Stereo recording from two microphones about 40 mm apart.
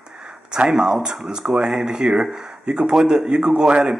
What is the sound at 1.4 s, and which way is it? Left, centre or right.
Speech, centre.